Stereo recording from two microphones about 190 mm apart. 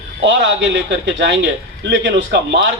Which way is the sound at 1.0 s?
70° right (ahead or behind).